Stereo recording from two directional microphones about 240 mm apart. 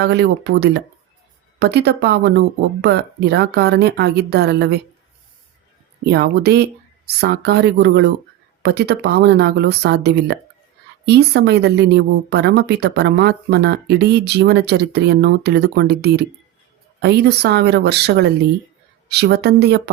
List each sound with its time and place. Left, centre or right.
0.0 s a woman's voice: right
6.1 s a woman's voice: right